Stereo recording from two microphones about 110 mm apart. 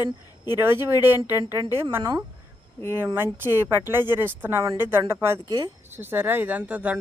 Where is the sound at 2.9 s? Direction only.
20° right (ahead or behind).